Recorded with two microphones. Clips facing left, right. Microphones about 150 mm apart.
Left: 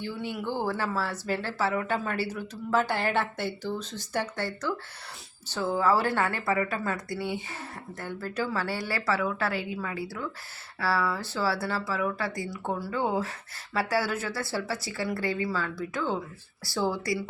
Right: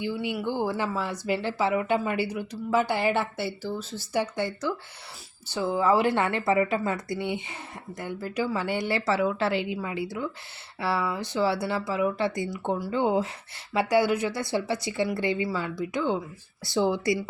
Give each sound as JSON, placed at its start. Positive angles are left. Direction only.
{"t": 0.0, "sound": "a woman's voice", "side_deg": -15}